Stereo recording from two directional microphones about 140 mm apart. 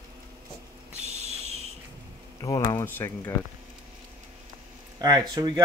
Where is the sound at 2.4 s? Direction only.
25° left (ahead or behind).